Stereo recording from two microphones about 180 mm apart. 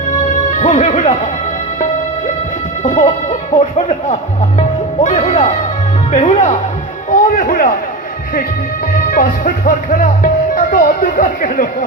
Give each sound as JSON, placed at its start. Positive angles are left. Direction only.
{"t": 0.3, "sound": "music", "side_deg": 45}
{"t": 2.8, "sound": "speech", "side_deg": 40}
{"t": 7.1, "sound": "music", "side_deg": 50}
{"t": 9.0, "sound": "speech", "side_deg": 50}